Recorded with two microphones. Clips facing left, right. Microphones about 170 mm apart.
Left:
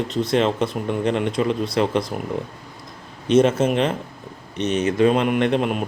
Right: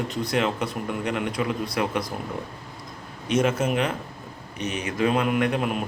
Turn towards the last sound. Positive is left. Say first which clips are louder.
# left 4 dB
turn(degrees=25)  # may be behind; listen again after turning